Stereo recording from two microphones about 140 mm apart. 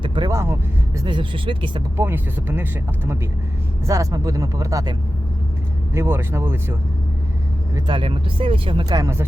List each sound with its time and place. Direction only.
0.0 s vehicle: 35° right (ahead or behind)
0.9 s speech: 35° right (ahead or behind)
2.0 s speech: 15° right (ahead or behind)
3.8 s speech: 25° right (ahead or behind)
7.9 s speech: 35° right (ahead or behind)
8.9 s speech: 25° right (ahead or behind)